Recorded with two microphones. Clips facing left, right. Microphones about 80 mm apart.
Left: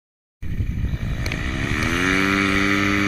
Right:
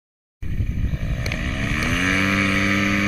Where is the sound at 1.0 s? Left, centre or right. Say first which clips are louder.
Even; left.